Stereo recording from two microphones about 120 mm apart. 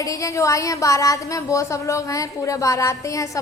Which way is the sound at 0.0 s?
25° left (ahead or behind).